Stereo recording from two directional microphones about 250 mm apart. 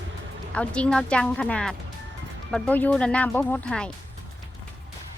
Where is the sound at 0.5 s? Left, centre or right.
Centre.